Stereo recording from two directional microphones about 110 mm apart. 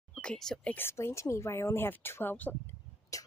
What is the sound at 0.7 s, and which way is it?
Speech, 20° left (ahead or behind).